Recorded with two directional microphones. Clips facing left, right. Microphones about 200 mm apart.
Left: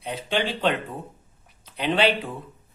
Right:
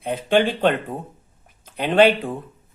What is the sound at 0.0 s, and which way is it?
Speech, 50° right (ahead or behind).